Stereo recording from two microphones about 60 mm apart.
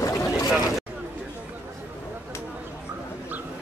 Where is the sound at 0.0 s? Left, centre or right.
Left.